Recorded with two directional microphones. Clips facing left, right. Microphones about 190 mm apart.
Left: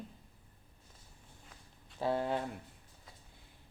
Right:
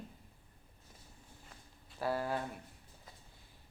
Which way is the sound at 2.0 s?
20° left (ahead or behind).